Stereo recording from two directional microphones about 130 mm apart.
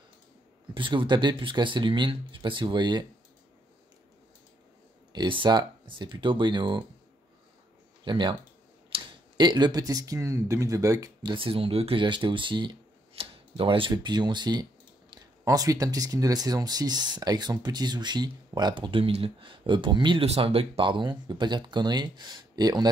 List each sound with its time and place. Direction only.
0.7 s speech: 40° right (ahead or behind)
5.1 s speech: 35° right (ahead or behind)
8.0 s speech: 40° right (ahead or behind)
11.3 s speech: 45° right (ahead or behind)
20.2 s speech: 50° right (ahead or behind); by 22.8 s 30° right (ahead or behind)